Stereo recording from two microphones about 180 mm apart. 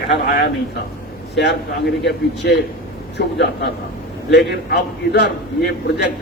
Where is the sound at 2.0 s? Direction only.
70° left (ahead or behind).